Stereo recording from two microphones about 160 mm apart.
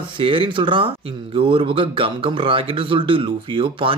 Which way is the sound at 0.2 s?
30° right (ahead or behind).